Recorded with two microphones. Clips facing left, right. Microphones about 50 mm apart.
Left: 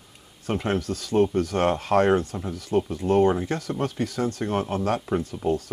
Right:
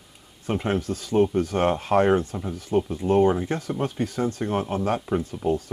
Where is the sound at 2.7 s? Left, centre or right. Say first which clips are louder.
Even; centre.